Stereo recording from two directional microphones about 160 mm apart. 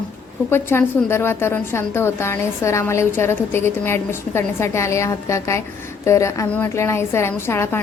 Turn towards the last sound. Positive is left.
turn(degrees=15)  # may be behind; listen again after turning